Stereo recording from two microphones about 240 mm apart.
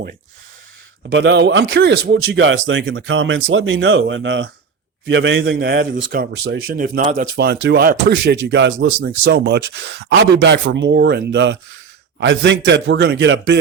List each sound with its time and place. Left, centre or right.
1.1 s speech: right